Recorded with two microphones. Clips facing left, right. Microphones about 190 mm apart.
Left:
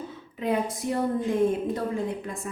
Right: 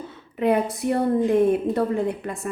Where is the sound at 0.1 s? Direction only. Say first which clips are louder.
Right 7 dB; 65° right (ahead or behind).